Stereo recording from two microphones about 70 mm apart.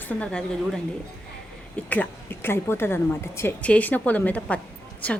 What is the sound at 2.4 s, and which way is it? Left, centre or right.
A woman's voice, left.